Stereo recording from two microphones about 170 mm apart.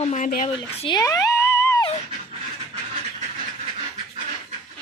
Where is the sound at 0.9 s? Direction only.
20° left (ahead or behind).